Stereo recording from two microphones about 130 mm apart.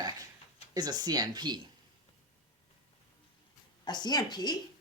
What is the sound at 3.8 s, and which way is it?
Speech, 35° left (ahead or behind).